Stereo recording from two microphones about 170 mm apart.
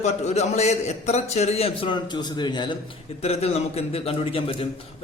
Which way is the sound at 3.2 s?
35° left (ahead or behind).